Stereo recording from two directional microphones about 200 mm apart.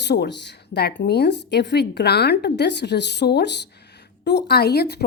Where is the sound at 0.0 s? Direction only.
60° left (ahead or behind).